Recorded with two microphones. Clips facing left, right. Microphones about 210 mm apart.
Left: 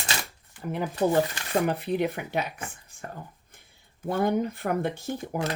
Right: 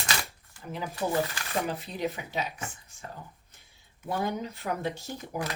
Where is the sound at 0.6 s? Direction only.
60° left (ahead or behind).